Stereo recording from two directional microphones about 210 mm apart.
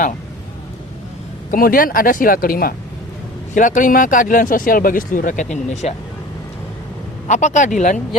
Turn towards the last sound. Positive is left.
turn(degrees=35)  # may be behind; listen again after turning